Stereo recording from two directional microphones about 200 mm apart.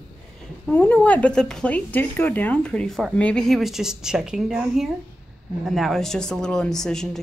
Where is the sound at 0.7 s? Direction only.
10° left (ahead or behind).